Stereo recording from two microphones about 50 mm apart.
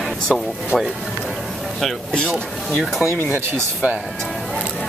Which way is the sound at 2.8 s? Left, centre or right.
Centre.